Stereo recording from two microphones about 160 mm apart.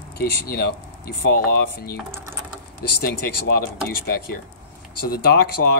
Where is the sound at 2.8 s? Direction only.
90° left.